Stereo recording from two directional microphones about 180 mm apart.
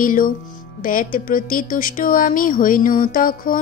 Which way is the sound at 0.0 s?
50° left (ahead or behind).